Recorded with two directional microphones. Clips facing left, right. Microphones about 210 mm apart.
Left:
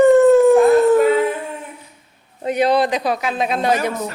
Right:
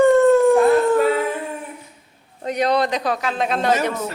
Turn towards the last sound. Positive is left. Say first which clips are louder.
# left 1 dB
turn(degrees=10)  # may be behind; listen again after turning